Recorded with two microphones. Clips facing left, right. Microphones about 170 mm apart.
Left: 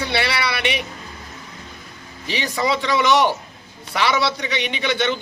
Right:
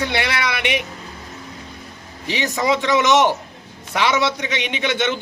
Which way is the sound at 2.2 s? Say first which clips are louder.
Right 2 dB; 15° right (ahead or behind).